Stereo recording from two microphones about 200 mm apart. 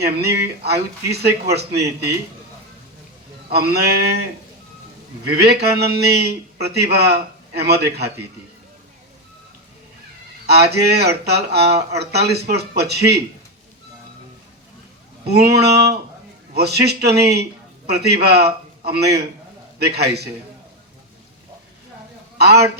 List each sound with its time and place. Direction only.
0.0 s speech: 55° right (ahead or behind)
3.5 s speech: 55° right (ahead or behind)
5.3 s speech: 55° right (ahead or behind)
10.4 s speech: 55° right (ahead or behind)
15.3 s speech: 55° right (ahead or behind)
22.4 s a man's voice: 55° right (ahead or behind)